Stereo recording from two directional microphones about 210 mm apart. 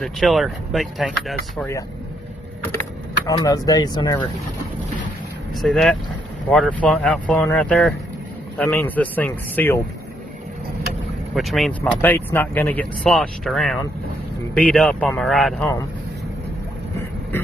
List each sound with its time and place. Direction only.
0.0 s speech: centre (ahead or behind)
3.3 s speech: 15° left (ahead or behind)
5.6 s speech: centre (ahead or behind)
11.3 s speech: centre (ahead or behind)